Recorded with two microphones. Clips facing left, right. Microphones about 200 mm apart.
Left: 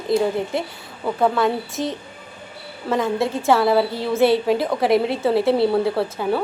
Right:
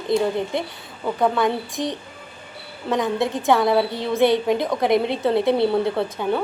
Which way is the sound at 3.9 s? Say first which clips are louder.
Left 1 dB; 20° right (ahead or behind).